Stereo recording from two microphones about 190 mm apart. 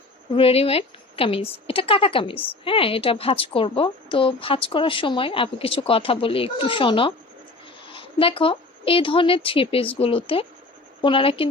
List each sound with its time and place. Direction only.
0.3 s a woman's voice: 30° left (ahead or behind)